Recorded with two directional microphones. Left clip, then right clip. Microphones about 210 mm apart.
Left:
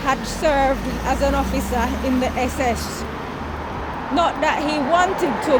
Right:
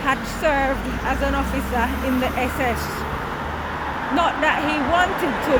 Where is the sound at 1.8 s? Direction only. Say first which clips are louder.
Even; 10° left (ahead or behind).